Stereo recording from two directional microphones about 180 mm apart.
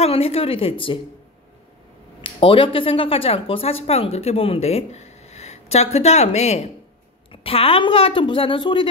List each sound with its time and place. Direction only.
0.0 s speech: 35° left (ahead or behind)
2.2 s speech: 30° left (ahead or behind)